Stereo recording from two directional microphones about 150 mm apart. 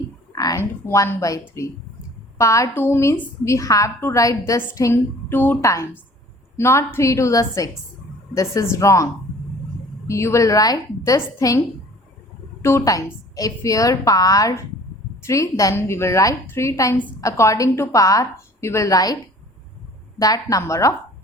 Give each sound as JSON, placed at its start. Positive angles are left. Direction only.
{"t": 0.3, "sound": "a sound", "side_deg": 25}
{"t": 0.9, "sound": "a woman's voice", "side_deg": 20}
{"t": 10.1, "sound": "a woman's voice", "side_deg": 20}
{"t": 12.6, "sound": "a woman's voice", "side_deg": 20}